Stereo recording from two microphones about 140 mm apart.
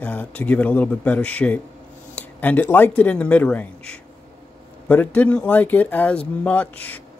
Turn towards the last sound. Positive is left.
turn(degrees=10)  # may be behind; listen again after turning